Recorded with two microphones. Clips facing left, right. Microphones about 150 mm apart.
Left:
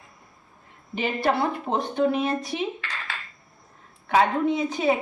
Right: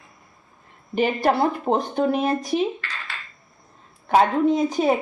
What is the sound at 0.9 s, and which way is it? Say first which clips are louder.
Speech: right 4 dB; 45° right (ahead or behind).